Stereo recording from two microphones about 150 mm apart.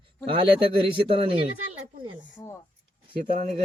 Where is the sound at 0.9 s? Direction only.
35° right (ahead or behind).